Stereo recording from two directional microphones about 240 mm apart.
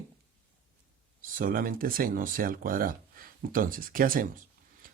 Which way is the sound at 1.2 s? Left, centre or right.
Right.